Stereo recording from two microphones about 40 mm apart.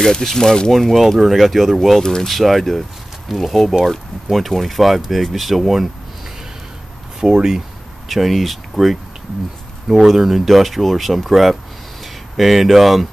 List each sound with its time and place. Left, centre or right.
0.0 s speech: centre
7.2 s speech: centre
8.1 s speech: centre